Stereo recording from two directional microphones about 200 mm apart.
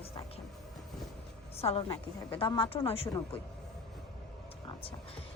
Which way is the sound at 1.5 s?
30° left (ahead or behind).